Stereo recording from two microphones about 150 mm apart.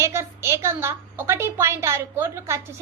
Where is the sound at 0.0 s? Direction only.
15° right (ahead or behind).